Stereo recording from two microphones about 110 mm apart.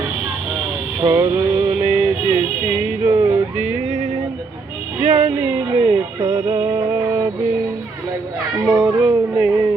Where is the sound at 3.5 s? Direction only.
15° right (ahead or behind).